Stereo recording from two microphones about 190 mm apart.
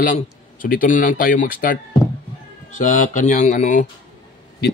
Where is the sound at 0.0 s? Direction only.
45° left (ahead or behind).